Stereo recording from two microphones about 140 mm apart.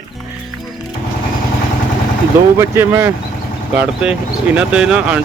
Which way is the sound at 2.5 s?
20° right (ahead or behind).